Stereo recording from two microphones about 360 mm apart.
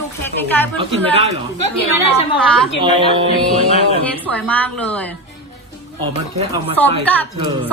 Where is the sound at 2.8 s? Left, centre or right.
Centre.